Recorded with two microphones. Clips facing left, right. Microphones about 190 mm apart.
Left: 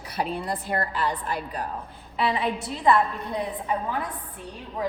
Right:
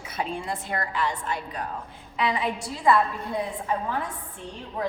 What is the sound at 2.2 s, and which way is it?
A woman's voice, 30° left (ahead or behind).